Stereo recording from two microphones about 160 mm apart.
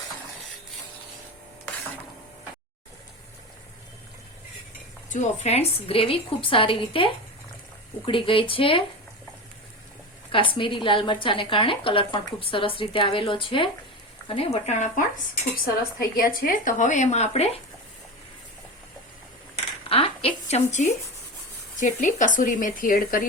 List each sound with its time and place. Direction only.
5.0 s a woman's voice: 50° left (ahead or behind); by 8.8 s 35° left (ahead or behind)
10.3 s a woman's voice: 35° left (ahead or behind)
15.6 s speech: 65° left (ahead or behind); by 17.6 s 40° left (ahead or behind)
19.9 s a sound: 35° left (ahead or behind)
21.8 s speech: 50° left (ahead or behind)